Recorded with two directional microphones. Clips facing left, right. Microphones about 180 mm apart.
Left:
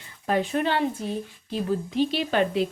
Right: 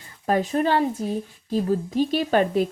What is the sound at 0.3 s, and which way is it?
Speech, 40° right (ahead or behind).